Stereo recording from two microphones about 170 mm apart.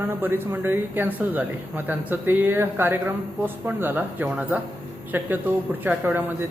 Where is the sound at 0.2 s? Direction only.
10° right (ahead or behind).